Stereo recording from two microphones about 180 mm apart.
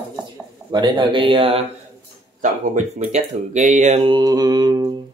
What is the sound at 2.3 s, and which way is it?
Speech, 45° right (ahead or behind).